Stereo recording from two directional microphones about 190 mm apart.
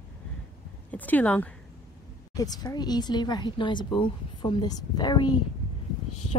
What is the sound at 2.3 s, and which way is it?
Speech, 20° left (ahead or behind).